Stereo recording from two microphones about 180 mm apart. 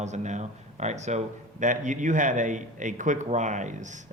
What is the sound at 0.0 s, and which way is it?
A man's voice, 40° right (ahead or behind).